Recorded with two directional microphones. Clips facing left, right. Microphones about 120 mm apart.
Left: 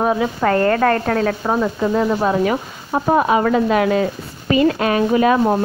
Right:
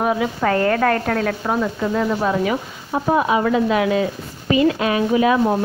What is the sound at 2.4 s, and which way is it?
Frying, 40° left (ahead or behind).